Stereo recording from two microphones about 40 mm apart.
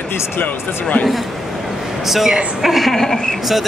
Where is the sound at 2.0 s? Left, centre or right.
Centre.